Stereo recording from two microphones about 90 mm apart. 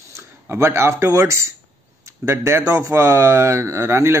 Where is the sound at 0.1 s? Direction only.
30° right (ahead or behind).